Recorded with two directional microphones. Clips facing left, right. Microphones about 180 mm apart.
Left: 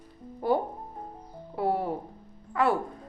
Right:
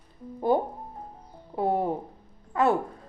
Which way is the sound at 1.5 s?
20° right (ahead or behind).